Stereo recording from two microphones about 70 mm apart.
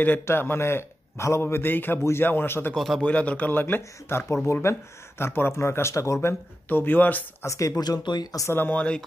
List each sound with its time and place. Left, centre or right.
0.2 s a man's voice: left
2.7 s a man's voice: centre
3.0 s a man's voice: centre; by 6.1 s left
6.7 s speech: left
7.4 s speech: left
7.8 s speech: left
8.5 s speech: left